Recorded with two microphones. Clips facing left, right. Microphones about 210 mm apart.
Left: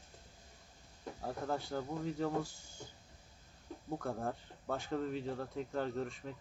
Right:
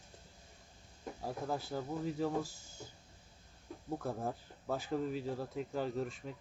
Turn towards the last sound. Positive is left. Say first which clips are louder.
# right 1 dB
turn(degrees=0)  # may be behind; listen again after turning